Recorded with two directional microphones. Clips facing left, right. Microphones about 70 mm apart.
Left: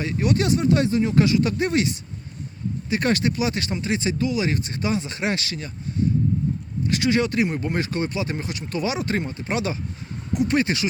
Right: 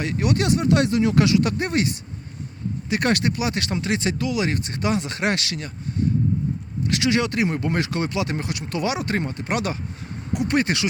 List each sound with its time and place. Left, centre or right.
0.0 s speech: right
6.8 s speech: right